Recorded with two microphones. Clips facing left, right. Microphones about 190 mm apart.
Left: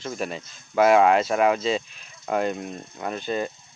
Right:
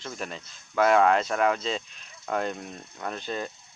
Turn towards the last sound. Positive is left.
turn(degrees=5)  # may be behind; listen again after turning